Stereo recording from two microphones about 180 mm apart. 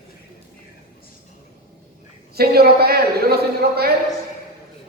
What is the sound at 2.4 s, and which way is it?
A man's voice, 60° right (ahead or behind).